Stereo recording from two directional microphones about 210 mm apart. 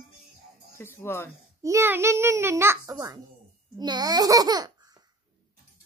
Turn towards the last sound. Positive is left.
turn(degrees=-20)  # may be behind; listen again after turning